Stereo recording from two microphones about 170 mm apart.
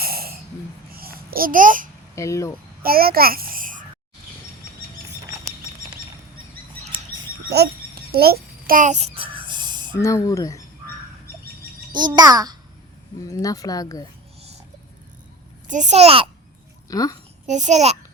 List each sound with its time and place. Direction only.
0.0 s a sound: 60° right (ahead or behind)
0.9 s babbling: 60° right (ahead or behind)
2.1 s speech: 20° left (ahead or behind)
2.8 s a child's voice: 60° right (ahead or behind)
7.5 s speech: 65° right (ahead or behind)
8.1 s a sound: 65° right (ahead or behind); by 9.9 s 25° right (ahead or behind)
9.9 s speech: 15° left (ahead or behind)
11.9 s a child's voice: 25° right (ahead or behind)
13.1 s speech: 20° left (ahead or behind)
15.6 s a child's voice: 45° right (ahead or behind)
16.9 s speech: 20° left (ahead or behind)
17.4 s a child's voice: 45° right (ahead or behind)